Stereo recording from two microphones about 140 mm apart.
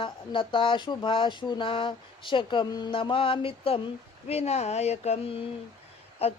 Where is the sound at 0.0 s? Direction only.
40° left (ahead or behind).